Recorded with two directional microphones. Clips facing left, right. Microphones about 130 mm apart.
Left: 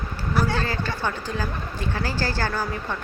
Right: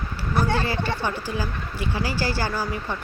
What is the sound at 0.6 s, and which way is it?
Speech, 10° right (ahead or behind).